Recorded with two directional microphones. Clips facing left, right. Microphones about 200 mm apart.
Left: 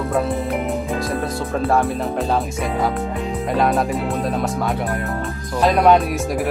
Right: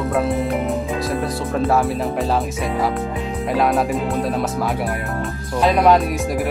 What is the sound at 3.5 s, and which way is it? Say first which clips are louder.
Speech: right 1 dB; centre (ahead or behind).